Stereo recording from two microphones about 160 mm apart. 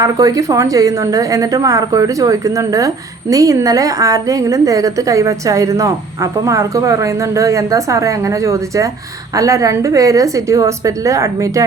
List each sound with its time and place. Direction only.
0.0 s a woman's voice: 20° right (ahead or behind)